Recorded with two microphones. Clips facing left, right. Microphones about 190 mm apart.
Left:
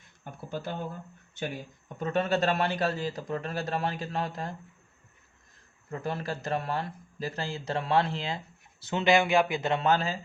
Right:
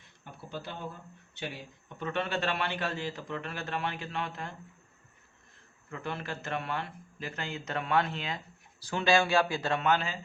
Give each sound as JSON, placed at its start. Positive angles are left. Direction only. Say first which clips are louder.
{"t": 0.3, "sound": "a sound", "louder": "left 5 dB", "side_deg": 50}
{"t": 1.4, "sound": "a man's voice", "louder": "left 5 dB", "side_deg": 45}
{"t": 5.9, "sound": "a man's voice", "louder": "left 4 dB", "side_deg": 40}
{"t": 9.8, "sound": "a man's voice", "louder": "left 3 dB", "side_deg": 35}